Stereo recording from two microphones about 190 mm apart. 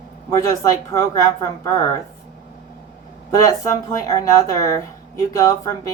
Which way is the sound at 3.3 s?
20° left (ahead or behind).